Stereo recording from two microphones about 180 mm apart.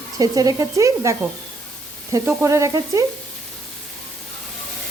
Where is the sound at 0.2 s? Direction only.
20° right (ahead or behind).